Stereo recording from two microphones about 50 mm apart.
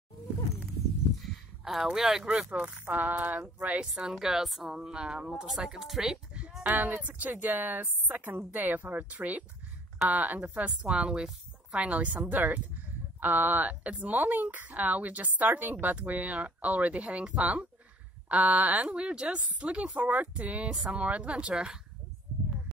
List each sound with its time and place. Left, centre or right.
1.2 s a sound: centre
1.9 s a woman's voice: centre
2.5 s speech: right
3.8 s a woman's voice: centre
6.7 s speech: right
10.9 s speech: centre